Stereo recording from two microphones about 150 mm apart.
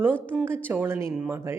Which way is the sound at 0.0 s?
15° right (ahead or behind).